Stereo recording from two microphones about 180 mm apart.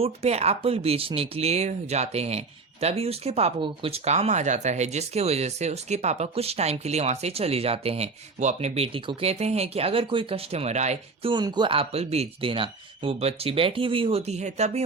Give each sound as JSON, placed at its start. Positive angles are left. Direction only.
{"t": 0.0, "sound": "speech", "side_deg": -35}
{"t": 11.3, "sound": "speech", "side_deg": -25}